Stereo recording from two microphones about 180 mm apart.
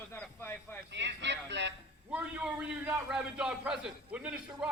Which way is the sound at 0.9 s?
75° right (ahead or behind).